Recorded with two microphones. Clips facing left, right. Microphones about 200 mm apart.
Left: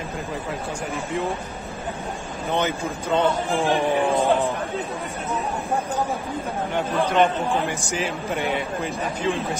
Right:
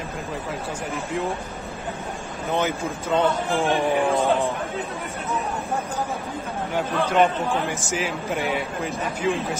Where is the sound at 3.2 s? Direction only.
Centre (ahead or behind).